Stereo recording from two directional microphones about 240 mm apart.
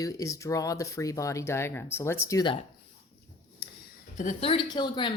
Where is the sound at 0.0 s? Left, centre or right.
Centre.